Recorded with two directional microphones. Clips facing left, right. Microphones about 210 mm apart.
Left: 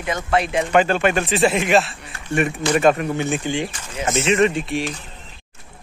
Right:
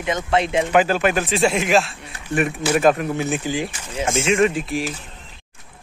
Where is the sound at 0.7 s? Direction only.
5° right (ahead or behind).